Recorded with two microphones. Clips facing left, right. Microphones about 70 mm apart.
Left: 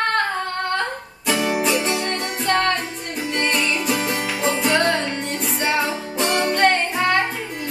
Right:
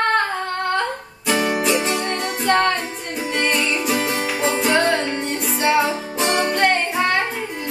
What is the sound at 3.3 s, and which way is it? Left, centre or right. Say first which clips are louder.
Music: right 1 dB; centre.